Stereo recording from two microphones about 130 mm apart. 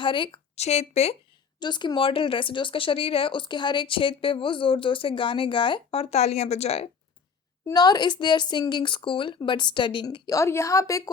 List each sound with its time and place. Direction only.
0.0 s speech: 40° left (ahead or behind)
0.5 s speech: 55° left (ahead or behind)
1.5 s speech: 35° left (ahead or behind); by 6.9 s 55° left (ahead or behind)
7.6 s speech: 30° left (ahead or behind)
10.3 s a woman's voice: 20° left (ahead or behind)